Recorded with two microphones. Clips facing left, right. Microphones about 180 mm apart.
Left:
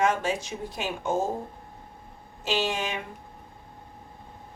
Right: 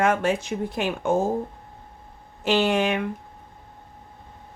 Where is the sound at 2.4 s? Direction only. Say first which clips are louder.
Right 7 dB; 60° right (ahead or behind).